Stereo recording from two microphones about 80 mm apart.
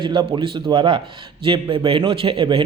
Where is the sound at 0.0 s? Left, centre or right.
Right.